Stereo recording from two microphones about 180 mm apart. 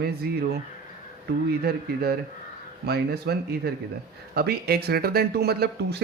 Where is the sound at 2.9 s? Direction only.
65° right (ahead or behind).